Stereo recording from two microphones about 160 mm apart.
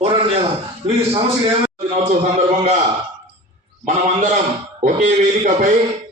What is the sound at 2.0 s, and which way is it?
Speech, 40° right (ahead or behind).